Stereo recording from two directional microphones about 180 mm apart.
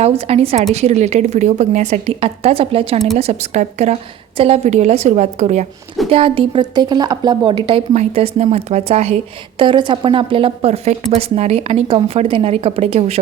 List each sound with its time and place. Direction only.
0.0 s a woman's voice: 35° right (ahead or behind)